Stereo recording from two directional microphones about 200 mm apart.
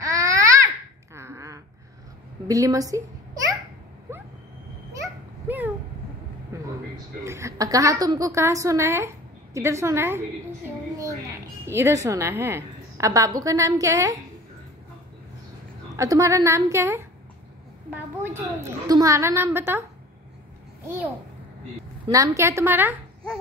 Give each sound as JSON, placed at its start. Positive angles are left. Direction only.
{"t": 0.0, "sound": "babbling", "side_deg": -15}
{"t": 1.1, "sound": "a sound", "side_deg": -15}
{"t": 2.4, "sound": "a child's voice", "side_deg": -15}
{"t": 4.1, "sound": "vehicle", "side_deg": -15}
{"t": 5.5, "sound": "a sound", "side_deg": -10}
{"t": 7.2, "sound": "a woman's voice", "side_deg": -15}
{"t": 16.0, "sound": "a woman's voice", "side_deg": -15}
{"t": 18.2, "sound": "a woman's voice", "side_deg": -10}
{"t": 22.0, "sound": "a woman's voice", "side_deg": -15}